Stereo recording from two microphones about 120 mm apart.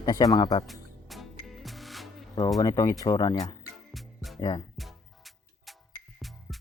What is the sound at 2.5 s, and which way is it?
Speech, 30° left (ahead or behind).